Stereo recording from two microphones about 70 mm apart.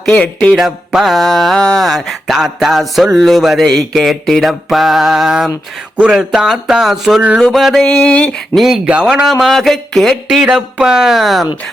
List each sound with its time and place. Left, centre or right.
0.1 s a sound: centre
0.5 s mantra: centre
6.0 s speech: centre
7.4 s mantra: centre
7.9 s a sound: centre
8.5 s mantra: centre
8.8 s mantra: centre
10.4 s speech: centre